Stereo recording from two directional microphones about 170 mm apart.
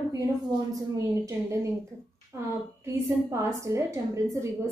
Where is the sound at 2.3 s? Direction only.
15° right (ahead or behind).